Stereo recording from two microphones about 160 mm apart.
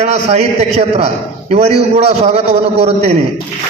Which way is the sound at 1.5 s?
40° right (ahead or behind).